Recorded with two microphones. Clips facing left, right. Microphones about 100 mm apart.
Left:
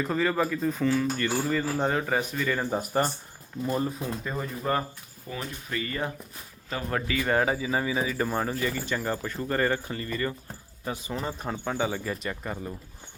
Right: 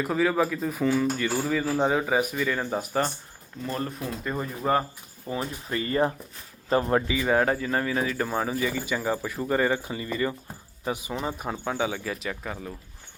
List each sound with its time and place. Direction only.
0.0 s speech: 5° right (ahead or behind)
3.6 s speech: 10° left (ahead or behind)
4.7 s speech: 10° right (ahead or behind)
5.3 s speech: 30° right (ahead or behind)
6.9 s speech: 15° right (ahead or behind)
7.3 s speech: centre (ahead or behind); by 11.1 s 15° right (ahead or behind)
11.1 s speech: 5° right (ahead or behind)